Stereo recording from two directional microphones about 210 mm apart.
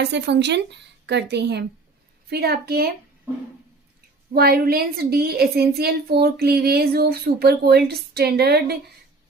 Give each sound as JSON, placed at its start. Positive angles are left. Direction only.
{"t": 0.0, "sound": "a woman's voice", "side_deg": -55}
{"t": 4.4, "sound": "a woman's voice", "side_deg": -45}